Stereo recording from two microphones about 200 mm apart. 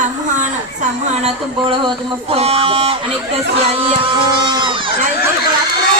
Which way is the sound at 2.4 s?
30° right (ahead or behind).